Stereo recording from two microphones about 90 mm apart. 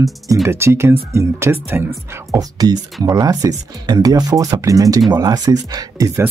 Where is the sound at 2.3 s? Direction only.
45° right (ahead or behind).